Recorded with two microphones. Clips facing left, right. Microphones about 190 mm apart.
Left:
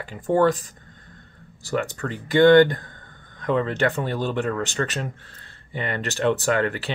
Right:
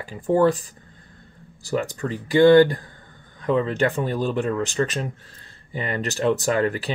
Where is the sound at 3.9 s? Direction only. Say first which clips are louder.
Right 1 dB; 10° right (ahead or behind).